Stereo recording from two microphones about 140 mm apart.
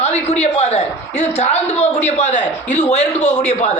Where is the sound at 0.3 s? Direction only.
50° left (ahead or behind).